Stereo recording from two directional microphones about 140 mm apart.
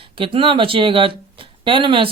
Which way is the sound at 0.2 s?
40° right (ahead or behind).